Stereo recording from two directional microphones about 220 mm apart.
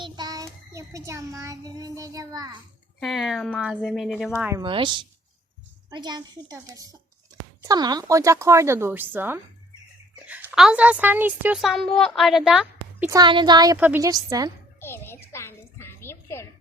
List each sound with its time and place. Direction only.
0.0 s child singing: 20° right (ahead or behind)
3.0 s a woman's voice: centre (ahead or behind)
4.6 s a woman's voice: 20° right (ahead or behind)
14.8 s a sound: 10° left (ahead or behind)